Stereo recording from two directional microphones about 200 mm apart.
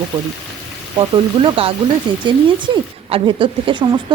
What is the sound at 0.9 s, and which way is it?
Speech, 20° right (ahead or behind).